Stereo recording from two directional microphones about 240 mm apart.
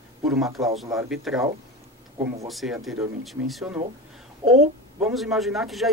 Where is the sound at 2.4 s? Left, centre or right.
Centre.